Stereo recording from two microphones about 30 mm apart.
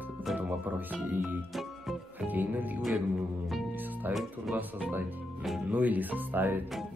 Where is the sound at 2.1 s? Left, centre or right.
Right.